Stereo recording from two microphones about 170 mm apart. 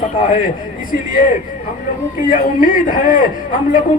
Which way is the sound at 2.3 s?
55° left (ahead or behind).